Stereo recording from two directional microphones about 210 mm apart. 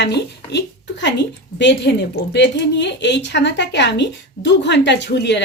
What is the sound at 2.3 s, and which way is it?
A woman's voice, 55° left (ahead or behind).